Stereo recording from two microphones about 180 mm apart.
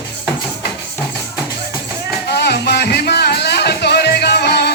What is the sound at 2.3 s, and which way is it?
Music, 65° left (ahead or behind).